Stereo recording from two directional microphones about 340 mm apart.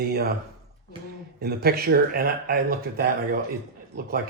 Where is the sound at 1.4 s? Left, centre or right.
Right.